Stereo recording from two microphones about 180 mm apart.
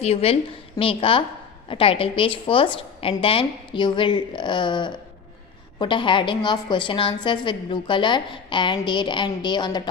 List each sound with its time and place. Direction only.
0.0 s a woman's voice: 35° left (ahead or behind)